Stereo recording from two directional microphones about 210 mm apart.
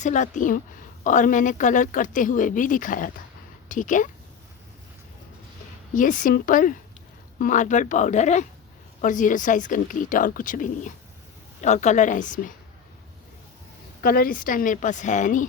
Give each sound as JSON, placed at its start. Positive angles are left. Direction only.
{"t": 0.0, "sound": "speech", "side_deg": 35}
{"t": 5.9, "sound": "speech", "side_deg": 40}
{"t": 14.0, "sound": "speech", "side_deg": 45}